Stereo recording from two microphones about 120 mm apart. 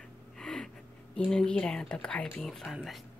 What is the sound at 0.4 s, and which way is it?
Gasp, 5° left (ahead or behind).